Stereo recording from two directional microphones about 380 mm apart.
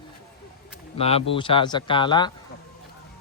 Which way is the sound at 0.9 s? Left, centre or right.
Centre.